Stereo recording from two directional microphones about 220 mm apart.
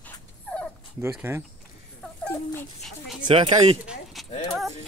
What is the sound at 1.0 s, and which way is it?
Speech, 10° right (ahead or behind).